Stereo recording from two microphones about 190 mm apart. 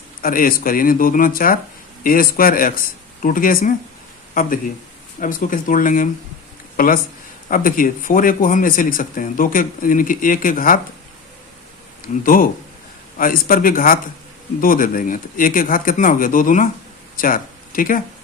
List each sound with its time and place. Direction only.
0.2 s speech: 50° left (ahead or behind)
5.2 s speech: 45° left (ahead or behind)
12.0 s speech: 45° left (ahead or behind)